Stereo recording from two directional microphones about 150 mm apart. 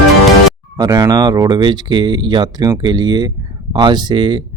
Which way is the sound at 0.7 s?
25° right (ahead or behind).